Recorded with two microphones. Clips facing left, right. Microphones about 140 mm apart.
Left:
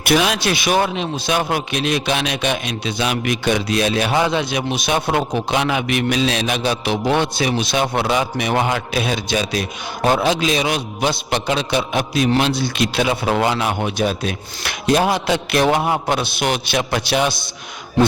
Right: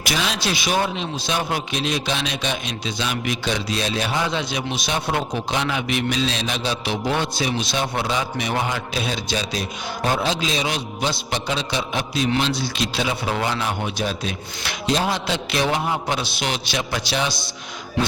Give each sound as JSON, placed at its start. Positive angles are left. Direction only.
{"t": 0.0, "sound": "a man's voice", "side_deg": 60}